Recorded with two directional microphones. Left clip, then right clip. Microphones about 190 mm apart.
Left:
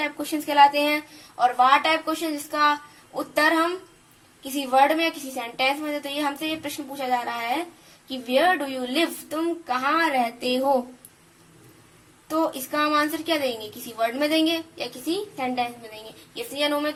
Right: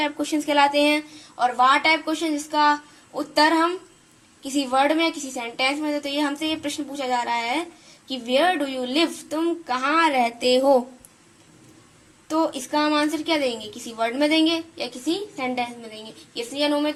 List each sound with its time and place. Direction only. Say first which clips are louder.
0.0 s a woman's voice: right 3 dB; 15° right (ahead or behind)
12.3 s a woman's voice: right 2 dB; 15° right (ahead or behind)